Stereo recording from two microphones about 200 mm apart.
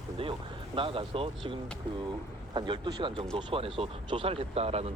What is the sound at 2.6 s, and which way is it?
Speech, 25° right (ahead or behind).